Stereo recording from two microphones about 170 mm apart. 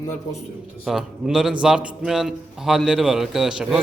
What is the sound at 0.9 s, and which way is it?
A man's voice, centre (ahead or behind).